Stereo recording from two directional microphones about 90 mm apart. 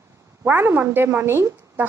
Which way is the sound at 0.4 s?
25° right (ahead or behind).